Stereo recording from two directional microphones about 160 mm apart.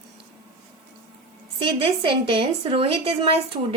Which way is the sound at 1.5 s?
35° right (ahead or behind).